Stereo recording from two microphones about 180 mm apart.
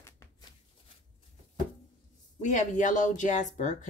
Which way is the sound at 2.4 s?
45° left (ahead or behind).